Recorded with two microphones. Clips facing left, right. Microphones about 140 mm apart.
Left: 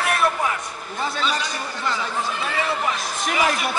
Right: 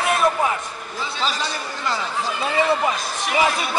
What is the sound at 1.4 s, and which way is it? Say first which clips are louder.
Speech: right 1 dB; 35° right (ahead or behind).